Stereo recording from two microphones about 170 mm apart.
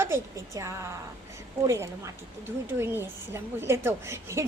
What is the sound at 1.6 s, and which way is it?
A woman's voice, 15° right (ahead or behind).